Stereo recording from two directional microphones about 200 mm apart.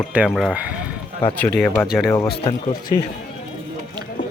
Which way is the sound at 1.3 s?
5° left (ahead or behind).